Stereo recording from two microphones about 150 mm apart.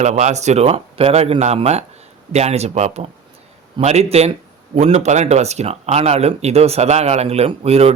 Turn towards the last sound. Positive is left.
turn(degrees=-45)  # may be behind; listen again after turning